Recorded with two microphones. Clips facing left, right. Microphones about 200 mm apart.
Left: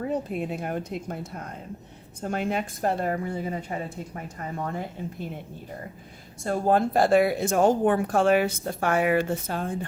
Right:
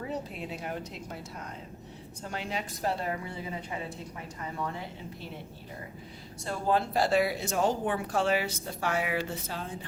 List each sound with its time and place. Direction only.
0.0 s speech: 50° left (ahead or behind)
6.4 s speech: 50° left (ahead or behind)